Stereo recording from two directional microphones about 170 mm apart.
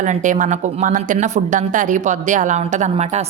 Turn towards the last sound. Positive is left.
turn(degrees=-40)  # may be behind; listen again after turning